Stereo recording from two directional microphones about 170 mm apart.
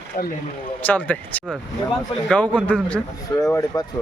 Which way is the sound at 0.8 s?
10° left (ahead or behind).